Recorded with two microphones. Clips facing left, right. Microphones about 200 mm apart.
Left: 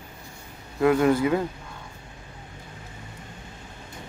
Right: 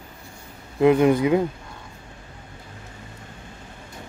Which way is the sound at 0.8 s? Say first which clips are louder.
Right 3 dB; 20° right (ahead or behind).